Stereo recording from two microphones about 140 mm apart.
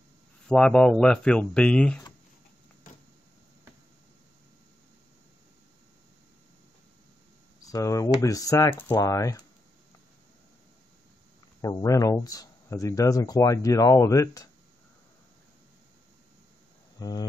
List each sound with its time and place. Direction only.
0.5 s speech: 5° left (ahead or behind)
7.6 s speech: 25° left (ahead or behind)
11.6 s speech: 25° left (ahead or behind)
17.0 s speech: 30° left (ahead or behind)